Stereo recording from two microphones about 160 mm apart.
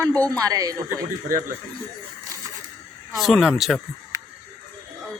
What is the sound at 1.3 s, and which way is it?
Speech, 60° right (ahead or behind).